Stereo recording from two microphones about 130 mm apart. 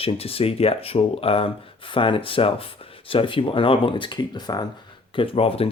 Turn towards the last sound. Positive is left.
turn(degrees=50)  # may be behind; listen again after turning